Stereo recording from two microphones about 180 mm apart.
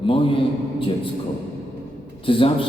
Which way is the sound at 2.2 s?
30° left (ahead or behind).